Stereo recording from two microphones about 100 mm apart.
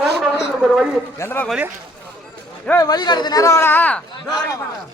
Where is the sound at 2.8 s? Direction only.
45° left (ahead or behind).